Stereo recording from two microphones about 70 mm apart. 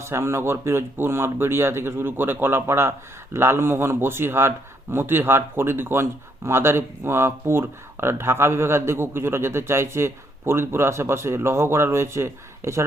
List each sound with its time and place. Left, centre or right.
0.0 s speech: right